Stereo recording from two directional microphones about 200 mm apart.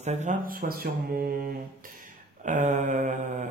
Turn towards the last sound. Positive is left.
turn(degrees=-40)  # may be behind; listen again after turning